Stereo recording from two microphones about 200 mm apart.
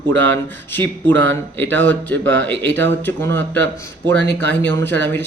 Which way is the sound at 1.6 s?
10° left (ahead or behind).